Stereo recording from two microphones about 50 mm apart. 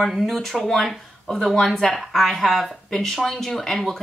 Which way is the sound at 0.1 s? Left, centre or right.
Centre.